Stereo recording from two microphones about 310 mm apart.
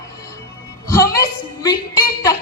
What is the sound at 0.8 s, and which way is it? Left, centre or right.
Speech, centre.